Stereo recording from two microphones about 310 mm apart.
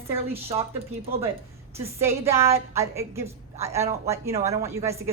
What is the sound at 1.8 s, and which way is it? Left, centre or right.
A woman's voice, centre.